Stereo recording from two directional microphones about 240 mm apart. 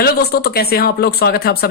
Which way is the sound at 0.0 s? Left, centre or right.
Left.